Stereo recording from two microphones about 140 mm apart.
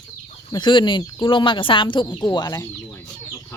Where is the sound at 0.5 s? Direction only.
35° left (ahead or behind).